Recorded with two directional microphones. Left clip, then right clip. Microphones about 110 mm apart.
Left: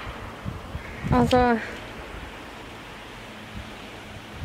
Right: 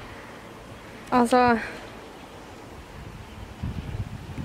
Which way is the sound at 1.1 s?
20° right (ahead or behind).